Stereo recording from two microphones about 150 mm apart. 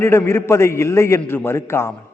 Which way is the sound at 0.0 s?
15° left (ahead or behind).